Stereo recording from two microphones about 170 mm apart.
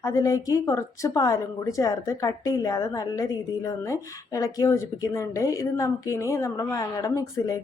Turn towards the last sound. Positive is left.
turn(degrees=20)  # may be behind; listen again after turning